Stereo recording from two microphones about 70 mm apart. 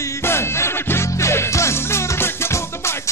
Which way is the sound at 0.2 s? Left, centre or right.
Left.